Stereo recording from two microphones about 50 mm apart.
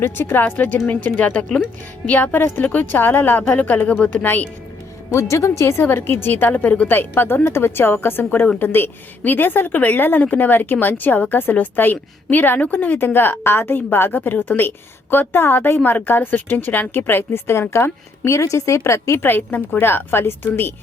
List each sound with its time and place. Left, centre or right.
0.0 s a woman's voice: left
5.1 s speech: left
5.8 s a woman's voice: left
8.2 s a woman's voice: left
8.5 s a woman's voice: left
13.4 s a woman's voice: left
19.2 s speech: left